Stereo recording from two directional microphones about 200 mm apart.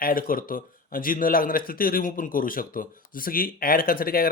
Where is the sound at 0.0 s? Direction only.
45° left (ahead or behind).